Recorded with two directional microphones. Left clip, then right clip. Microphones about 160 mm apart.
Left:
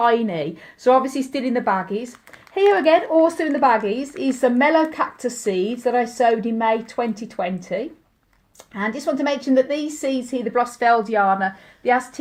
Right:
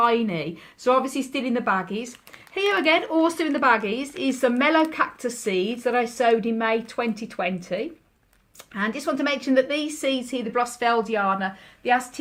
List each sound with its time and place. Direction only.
0.0 s a woman's voice: 35° left (ahead or behind)
8.7 s a woman's voice: 30° left (ahead or behind)